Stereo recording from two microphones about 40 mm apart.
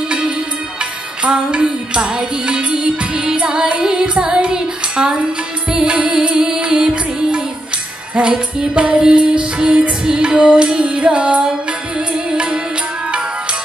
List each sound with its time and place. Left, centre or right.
1.2 s music: right